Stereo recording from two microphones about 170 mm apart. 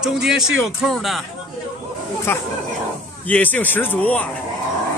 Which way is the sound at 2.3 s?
15° left (ahead or behind).